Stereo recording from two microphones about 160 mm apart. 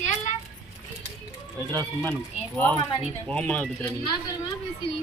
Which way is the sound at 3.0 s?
5° left (ahead or behind).